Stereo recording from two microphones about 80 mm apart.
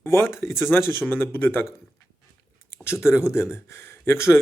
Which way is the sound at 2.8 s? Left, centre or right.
Left.